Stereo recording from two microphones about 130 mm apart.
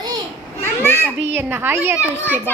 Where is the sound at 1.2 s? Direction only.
15° right (ahead or behind).